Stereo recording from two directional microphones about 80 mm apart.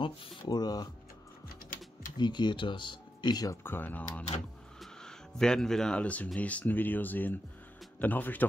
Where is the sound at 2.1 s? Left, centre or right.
Left.